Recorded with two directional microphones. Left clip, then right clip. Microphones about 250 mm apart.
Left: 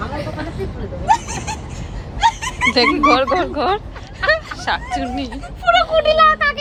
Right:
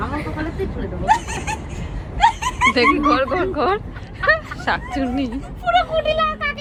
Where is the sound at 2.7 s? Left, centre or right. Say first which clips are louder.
Left 6 dB; centre.